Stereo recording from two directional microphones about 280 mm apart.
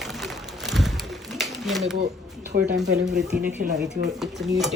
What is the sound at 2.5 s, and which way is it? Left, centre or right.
Speech, right.